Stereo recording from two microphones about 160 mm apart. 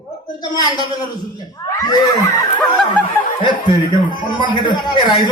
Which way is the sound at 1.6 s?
20° left (ahead or behind).